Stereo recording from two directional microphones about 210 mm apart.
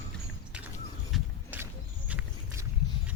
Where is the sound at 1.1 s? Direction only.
10° right (ahead or behind).